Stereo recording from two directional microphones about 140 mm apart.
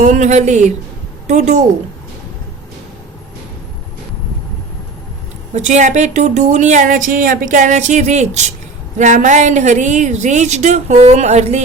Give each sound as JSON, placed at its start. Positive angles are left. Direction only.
{"t": 0.0, "sound": "speech", "side_deg": -60}
{"t": 5.5, "sound": "speech", "side_deg": -60}